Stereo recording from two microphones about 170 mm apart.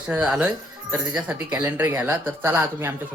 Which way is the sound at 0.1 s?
5° right (ahead or behind).